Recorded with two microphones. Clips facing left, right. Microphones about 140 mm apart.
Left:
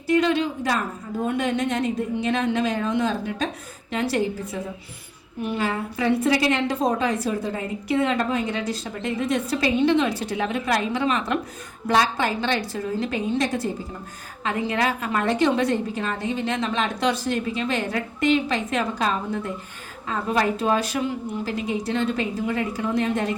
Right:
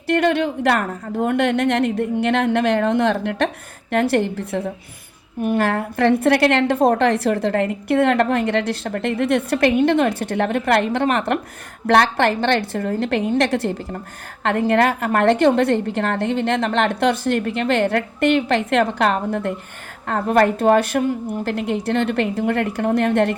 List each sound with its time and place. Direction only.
0.1 s a woman's voice: 60° right (ahead or behind)
11.9 s a woman's voice: 70° right (ahead or behind)
14.4 s a woman's voice: 60° right (ahead or behind)